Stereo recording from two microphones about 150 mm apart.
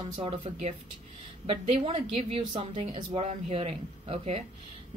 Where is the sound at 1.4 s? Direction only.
40° right (ahead or behind).